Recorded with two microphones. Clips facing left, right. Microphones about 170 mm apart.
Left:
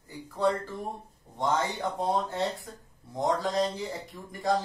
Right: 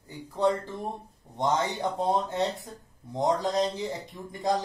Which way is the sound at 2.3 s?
20° right (ahead or behind).